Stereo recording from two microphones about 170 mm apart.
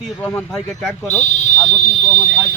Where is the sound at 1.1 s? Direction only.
45° left (ahead or behind).